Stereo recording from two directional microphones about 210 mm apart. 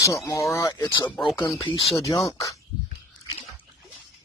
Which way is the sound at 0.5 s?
15° left (ahead or behind).